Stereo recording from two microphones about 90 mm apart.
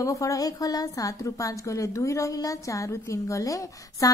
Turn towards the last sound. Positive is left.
turn(degrees=40)  # may be behind; listen again after turning